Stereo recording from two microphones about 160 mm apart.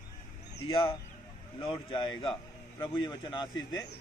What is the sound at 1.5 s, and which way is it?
Speech, 30° left (ahead or behind).